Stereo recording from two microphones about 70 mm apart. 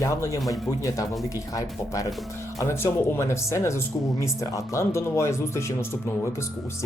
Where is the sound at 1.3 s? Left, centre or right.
Left.